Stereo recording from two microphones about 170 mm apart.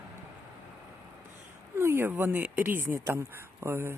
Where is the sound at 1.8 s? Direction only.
15° right (ahead or behind).